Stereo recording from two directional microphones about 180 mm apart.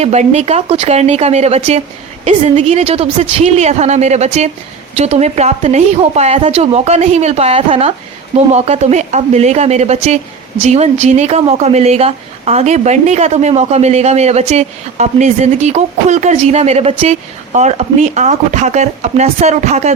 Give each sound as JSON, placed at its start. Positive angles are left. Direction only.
{"t": 0.0, "sound": "speech", "side_deg": -40}